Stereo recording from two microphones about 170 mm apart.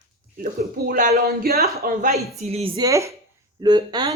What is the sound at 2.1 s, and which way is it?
Speech, 40° right (ahead or behind).